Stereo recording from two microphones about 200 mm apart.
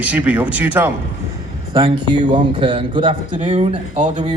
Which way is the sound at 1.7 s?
20° right (ahead or behind).